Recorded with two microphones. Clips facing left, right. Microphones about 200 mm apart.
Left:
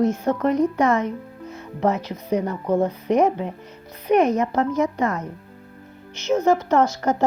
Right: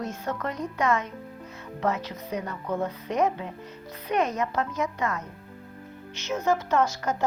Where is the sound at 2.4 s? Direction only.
30° left (ahead or behind).